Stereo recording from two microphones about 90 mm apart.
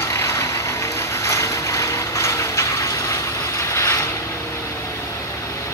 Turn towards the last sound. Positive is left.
turn(degrees=35)  # may be behind; listen again after turning